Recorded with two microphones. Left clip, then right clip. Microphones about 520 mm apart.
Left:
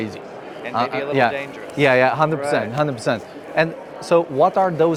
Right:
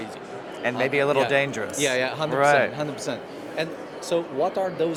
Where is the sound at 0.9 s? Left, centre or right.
Right.